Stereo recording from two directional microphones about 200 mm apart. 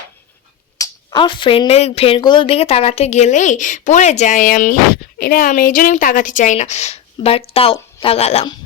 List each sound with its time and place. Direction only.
0.8 s a woman's voice: 25° left (ahead or behind)